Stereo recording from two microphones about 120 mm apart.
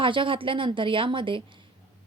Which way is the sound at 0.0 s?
45° right (ahead or behind).